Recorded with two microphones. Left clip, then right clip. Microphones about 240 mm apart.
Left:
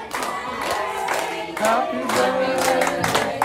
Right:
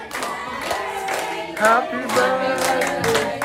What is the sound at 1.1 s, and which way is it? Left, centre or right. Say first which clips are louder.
Choir: even; centre.